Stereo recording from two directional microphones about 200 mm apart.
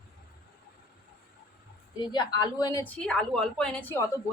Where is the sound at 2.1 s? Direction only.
20° left (ahead or behind).